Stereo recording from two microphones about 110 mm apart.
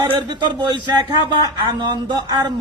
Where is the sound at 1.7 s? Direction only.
40° right (ahead or behind).